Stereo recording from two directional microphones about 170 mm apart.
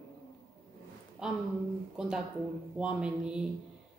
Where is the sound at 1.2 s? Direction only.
5° right (ahead or behind).